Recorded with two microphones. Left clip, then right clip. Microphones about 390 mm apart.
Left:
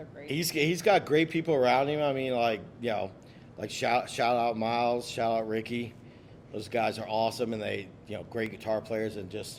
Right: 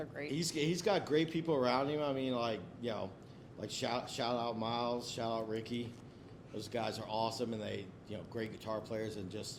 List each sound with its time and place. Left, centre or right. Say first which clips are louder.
0.3 s speech: left 9 dB; centre